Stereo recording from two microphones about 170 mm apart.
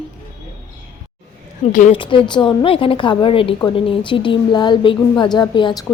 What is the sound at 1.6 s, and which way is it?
Speech, 45° left (ahead or behind).